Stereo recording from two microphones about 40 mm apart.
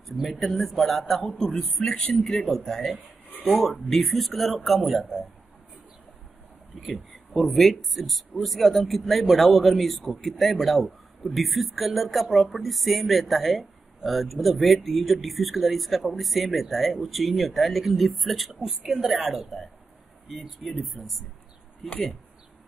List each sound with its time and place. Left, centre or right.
0.0 s speech: centre
1.8 s a man's voice: centre
2.7 s speech: centre
7.3 s speech: centre